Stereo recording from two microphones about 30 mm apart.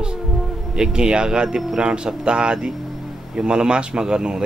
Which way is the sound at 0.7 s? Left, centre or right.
Right.